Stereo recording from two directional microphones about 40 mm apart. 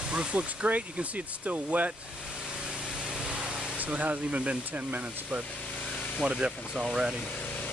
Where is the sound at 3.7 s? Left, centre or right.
Right.